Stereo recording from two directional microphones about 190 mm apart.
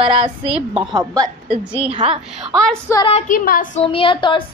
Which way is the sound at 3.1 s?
40° left (ahead or behind).